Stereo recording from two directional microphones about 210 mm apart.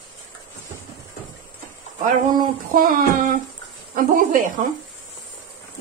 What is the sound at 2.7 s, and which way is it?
Speech, 40° right (ahead or behind).